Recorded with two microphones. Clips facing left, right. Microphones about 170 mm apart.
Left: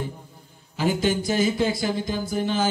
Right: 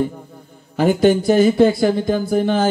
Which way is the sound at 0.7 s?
55° right (ahead or behind).